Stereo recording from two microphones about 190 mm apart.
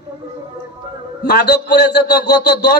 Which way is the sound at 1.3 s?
60° left (ahead or behind).